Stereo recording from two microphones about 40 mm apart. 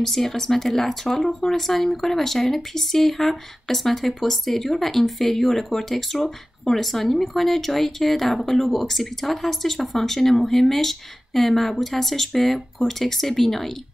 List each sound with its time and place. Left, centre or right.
0.0 s speech: centre